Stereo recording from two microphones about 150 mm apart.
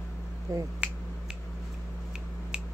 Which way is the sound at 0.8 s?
10° right (ahead or behind).